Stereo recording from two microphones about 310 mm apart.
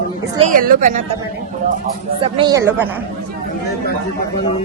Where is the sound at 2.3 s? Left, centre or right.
Centre.